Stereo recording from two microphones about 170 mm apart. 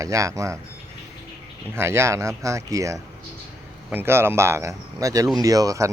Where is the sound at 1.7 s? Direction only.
15° right (ahead or behind).